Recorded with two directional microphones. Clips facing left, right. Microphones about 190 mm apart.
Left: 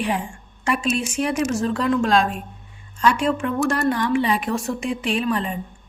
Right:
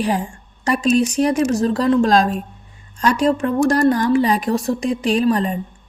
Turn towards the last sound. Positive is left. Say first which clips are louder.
# right 6 dB
turn(degrees=-40)  # may be behind; listen again after turning